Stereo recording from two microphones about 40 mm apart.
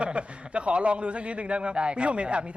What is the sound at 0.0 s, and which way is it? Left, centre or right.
A man's voice, right.